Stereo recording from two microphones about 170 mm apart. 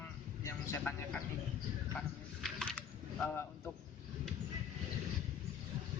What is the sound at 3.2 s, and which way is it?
Speech, 10° left (ahead or behind).